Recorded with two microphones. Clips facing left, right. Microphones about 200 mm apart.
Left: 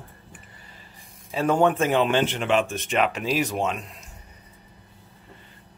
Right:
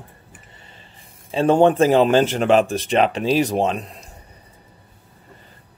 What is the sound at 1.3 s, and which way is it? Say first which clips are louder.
Speech: right 6 dB; 30° right (ahead or behind).